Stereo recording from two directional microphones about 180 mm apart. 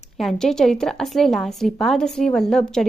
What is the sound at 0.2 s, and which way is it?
A woman's voice, centre (ahead or behind).